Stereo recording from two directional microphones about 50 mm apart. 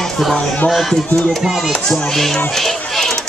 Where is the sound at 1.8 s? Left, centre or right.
Centre.